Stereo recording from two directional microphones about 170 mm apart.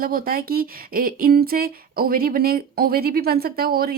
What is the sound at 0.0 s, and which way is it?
Speech, 60° right (ahead or behind).